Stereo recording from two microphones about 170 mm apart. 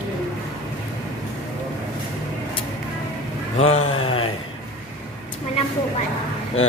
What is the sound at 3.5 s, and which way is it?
Speech, 35° left (ahead or behind).